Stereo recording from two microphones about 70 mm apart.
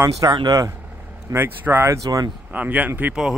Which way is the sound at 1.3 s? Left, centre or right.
Right.